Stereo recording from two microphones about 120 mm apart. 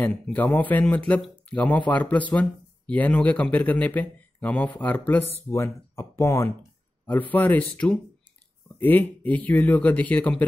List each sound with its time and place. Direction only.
0.0 s speech: 15° left (ahead or behind)